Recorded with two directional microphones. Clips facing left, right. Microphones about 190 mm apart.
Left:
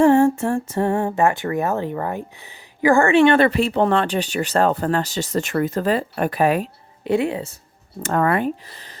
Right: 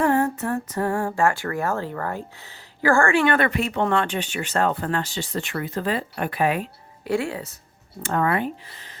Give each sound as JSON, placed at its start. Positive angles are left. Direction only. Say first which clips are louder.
{"t": 0.0, "sound": "speech", "louder": "left 7 dB", "side_deg": 25}
{"t": 7.0, "sound": "speech", "louder": "left 5 dB", "side_deg": 20}
{"t": 8.0, "sound": "speech", "louder": "left 4 dB", "side_deg": 50}